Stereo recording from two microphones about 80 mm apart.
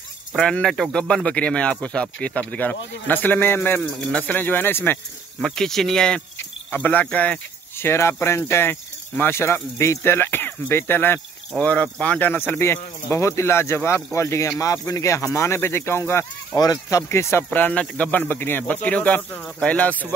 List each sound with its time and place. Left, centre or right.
0.4 s speech: centre; by 3.8 s left
3.8 s speech: centre
4.2 s speech: left
5.4 s speech: centre
6.7 s speech: left
7.7 s speech: left
11.6 s speech: centre; by 16.3 s left
16.5 s speech: left
17.5 s speech: left